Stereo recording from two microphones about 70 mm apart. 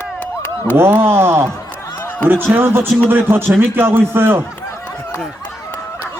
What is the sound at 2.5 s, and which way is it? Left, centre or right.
A man's voice, right.